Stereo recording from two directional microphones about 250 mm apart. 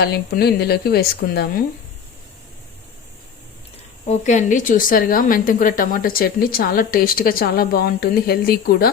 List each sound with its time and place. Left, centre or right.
0.0 s a woman's voice: left
4.1 s a woman's voice: left